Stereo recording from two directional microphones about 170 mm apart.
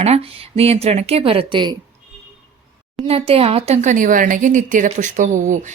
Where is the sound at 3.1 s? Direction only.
35° right (ahead or behind).